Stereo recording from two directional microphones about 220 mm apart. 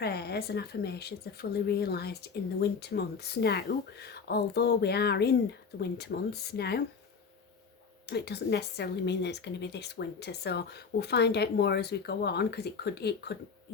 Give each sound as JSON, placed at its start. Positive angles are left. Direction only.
{"t": 0.0, "sound": "speech", "side_deg": 45}
{"t": 8.0, "sound": "speech", "side_deg": 50}